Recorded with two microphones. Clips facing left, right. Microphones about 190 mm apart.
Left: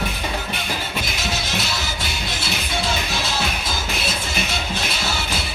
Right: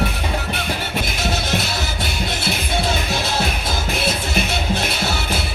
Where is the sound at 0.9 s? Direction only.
55° right (ahead or behind).